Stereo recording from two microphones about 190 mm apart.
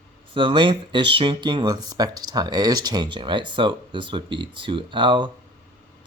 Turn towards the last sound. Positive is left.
turn(degrees=-25)  # may be behind; listen again after turning